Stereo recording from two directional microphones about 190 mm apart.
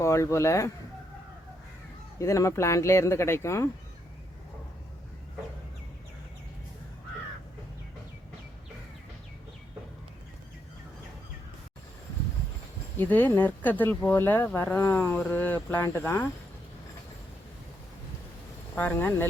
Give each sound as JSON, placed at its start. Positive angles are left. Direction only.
{"t": 0.0, "sound": "speech", "side_deg": 15}
{"t": 2.1, "sound": "speech", "side_deg": 15}
{"t": 13.0, "sound": "speech", "side_deg": 10}
{"t": 18.7, "sound": "speech", "side_deg": 10}